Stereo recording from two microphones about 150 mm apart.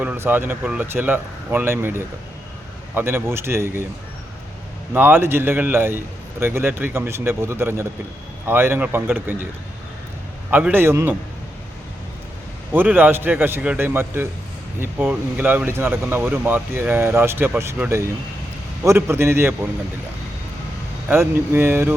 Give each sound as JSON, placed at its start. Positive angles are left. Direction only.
{"t": 0.0, "sound": "speech", "side_deg": -10}
{"t": 4.9, "sound": "speech", "side_deg": -15}
{"t": 10.5, "sound": "speech", "side_deg": -10}
{"t": 12.7, "sound": "speech", "side_deg": -15}
{"t": 21.1, "sound": "speech", "side_deg": -15}